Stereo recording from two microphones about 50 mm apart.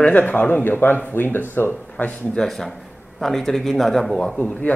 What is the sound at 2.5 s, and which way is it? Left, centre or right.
A man's voice, centre.